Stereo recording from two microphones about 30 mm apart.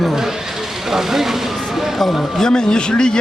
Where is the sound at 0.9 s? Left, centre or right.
Centre.